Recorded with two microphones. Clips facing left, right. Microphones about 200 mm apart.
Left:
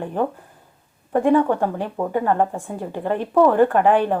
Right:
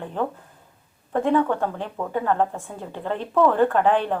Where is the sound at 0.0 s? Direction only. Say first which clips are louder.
Left 4 dB; 15° left (ahead or behind).